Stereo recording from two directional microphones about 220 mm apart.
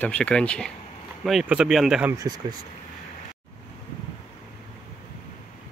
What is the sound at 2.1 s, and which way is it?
Speech, 20° right (ahead or behind).